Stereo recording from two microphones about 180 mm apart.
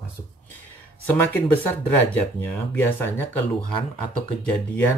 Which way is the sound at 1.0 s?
10° left (ahead or behind).